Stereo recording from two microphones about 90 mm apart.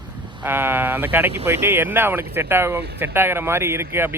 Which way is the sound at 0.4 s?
25° right (ahead or behind).